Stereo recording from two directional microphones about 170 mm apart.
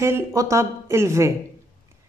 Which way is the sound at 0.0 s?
15° right (ahead or behind).